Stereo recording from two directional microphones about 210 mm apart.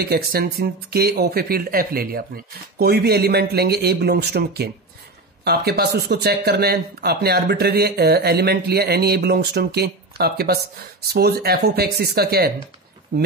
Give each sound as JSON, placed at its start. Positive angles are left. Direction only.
{"t": 0.0, "sound": "speech", "side_deg": -50}